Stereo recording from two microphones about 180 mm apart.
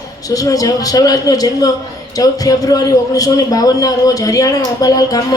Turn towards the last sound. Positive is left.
turn(degrees=20)  # may be behind; listen again after turning